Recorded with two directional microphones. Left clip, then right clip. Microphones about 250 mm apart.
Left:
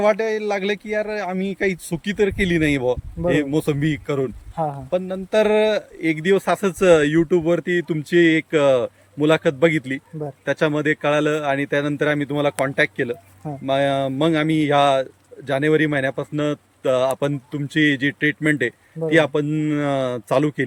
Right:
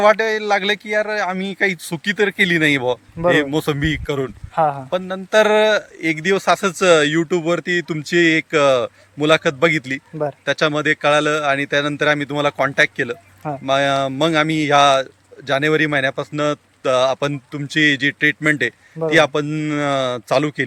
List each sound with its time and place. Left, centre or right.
0.0 s speech: centre